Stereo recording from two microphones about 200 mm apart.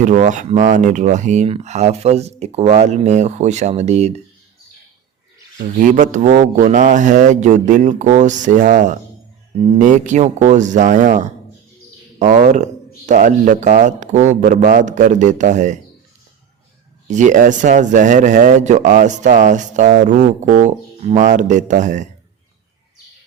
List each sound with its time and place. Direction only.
0.0 s speech: 40° right (ahead or behind)
5.5 s speech: 40° right (ahead or behind)
17.1 s speech: 40° right (ahead or behind)